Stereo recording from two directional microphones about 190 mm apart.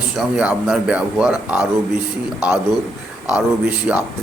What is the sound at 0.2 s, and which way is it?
Speech, 5° right (ahead or behind).